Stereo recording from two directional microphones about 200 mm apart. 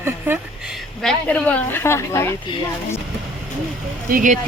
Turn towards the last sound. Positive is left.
turn(degrees=-45)  # may be behind; listen again after turning